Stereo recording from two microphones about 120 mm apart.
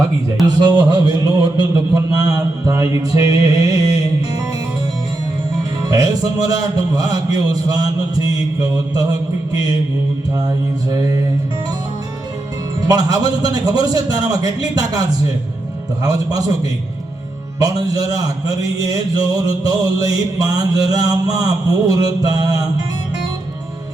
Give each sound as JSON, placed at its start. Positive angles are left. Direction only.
{"t": 0.4, "sound": "speech", "side_deg": -35}
{"t": 1.7, "sound": "mantra", "side_deg": -30}
{"t": 5.8, "sound": "speech", "side_deg": -30}
{"t": 10.9, "sound": "speech", "side_deg": -30}
{"t": 12.8, "sound": "speech", "side_deg": -35}
{"t": 17.6, "sound": "speech", "side_deg": -30}